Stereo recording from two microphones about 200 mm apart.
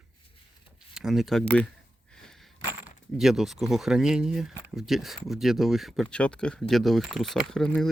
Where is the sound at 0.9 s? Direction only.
Centre (ahead or behind).